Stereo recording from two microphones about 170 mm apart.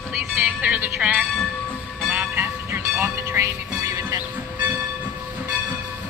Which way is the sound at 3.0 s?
15° right (ahead or behind).